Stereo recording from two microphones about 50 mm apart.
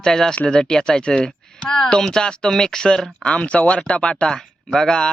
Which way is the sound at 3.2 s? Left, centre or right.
Left.